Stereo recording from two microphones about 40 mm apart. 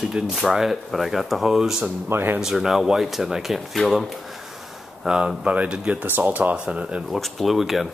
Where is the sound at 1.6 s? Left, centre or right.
Centre.